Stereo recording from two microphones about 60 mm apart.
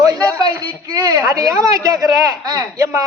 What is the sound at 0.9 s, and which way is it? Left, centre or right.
A woman's voice, right.